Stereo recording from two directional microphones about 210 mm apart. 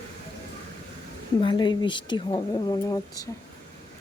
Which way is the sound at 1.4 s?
20° left (ahead or behind).